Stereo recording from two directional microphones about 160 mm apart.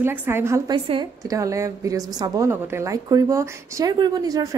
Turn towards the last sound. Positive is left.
turn(degrees=-25)  # may be behind; listen again after turning